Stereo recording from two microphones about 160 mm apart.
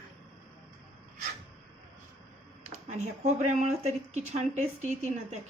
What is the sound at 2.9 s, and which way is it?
Speech, 45° right (ahead or behind).